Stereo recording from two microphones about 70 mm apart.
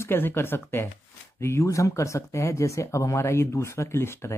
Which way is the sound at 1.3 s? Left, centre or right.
Left.